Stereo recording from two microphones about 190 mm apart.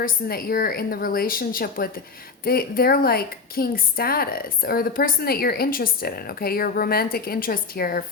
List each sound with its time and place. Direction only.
0.0 s a woman's voice: 50° left (ahead or behind)